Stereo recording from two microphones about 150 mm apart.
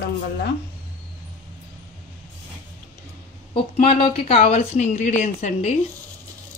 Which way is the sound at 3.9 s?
35° left (ahead or behind).